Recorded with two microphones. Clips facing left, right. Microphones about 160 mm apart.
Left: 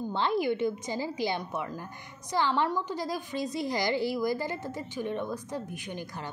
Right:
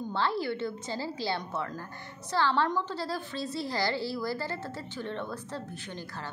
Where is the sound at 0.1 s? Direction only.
15° left (ahead or behind).